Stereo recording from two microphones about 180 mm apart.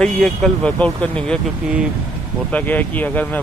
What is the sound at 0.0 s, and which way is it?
Speech, 5° left (ahead or behind).